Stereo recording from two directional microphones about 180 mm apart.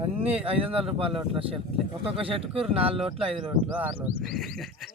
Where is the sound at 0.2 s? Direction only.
35° right (ahead or behind).